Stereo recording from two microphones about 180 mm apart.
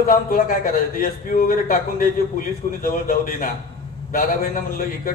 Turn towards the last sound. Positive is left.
turn(degrees=50)  # may be behind; listen again after turning